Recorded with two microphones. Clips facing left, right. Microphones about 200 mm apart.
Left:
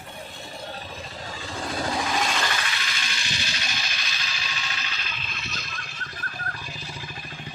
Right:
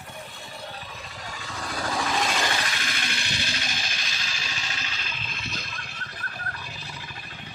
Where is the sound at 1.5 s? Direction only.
25° left (ahead or behind).